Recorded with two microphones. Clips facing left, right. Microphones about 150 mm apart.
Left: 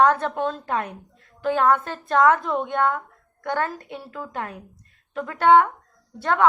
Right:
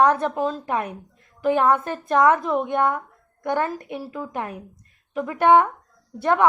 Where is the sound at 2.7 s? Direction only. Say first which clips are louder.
Right 1 dB; 15° right (ahead or behind).